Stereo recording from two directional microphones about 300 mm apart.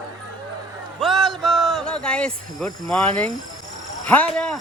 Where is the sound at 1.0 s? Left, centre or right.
Centre.